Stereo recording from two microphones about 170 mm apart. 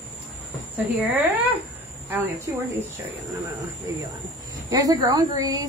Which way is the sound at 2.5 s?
20° right (ahead or behind).